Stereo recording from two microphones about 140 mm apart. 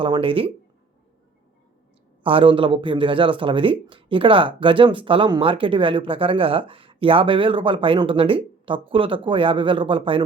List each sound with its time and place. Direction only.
0.0 s speech: 40° right (ahead or behind)
2.2 s speech: 40° right (ahead or behind)